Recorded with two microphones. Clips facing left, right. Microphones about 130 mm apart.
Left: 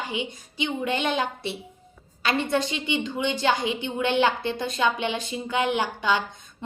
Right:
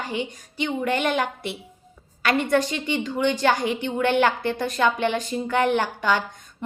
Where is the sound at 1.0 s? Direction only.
50° right (ahead or behind).